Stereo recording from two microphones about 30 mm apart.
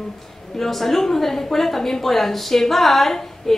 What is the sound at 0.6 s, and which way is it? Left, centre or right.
A woman's voice, centre.